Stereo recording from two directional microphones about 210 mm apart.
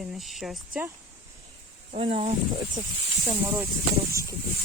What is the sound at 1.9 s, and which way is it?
Speech, 30° right (ahead or behind).